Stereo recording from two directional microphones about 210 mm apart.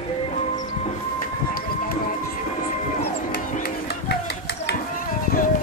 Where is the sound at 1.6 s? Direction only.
45° left (ahead or behind).